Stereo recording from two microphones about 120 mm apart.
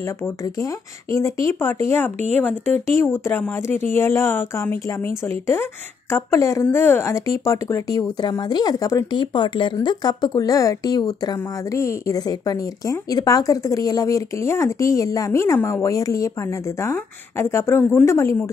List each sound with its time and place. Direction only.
0.0 s speech: 25° left (ahead or behind)
9.1 s speech: 40° left (ahead or behind); by 18.4 s 20° left (ahead or behind)